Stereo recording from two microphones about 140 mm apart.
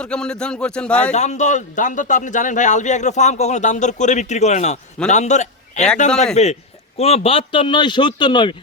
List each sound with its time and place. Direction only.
0.0 s a man's voice: 5° left (ahead or behind)
1.1 s a man's voice: 55° left (ahead or behind); by 8.5 s 35° left (ahead or behind)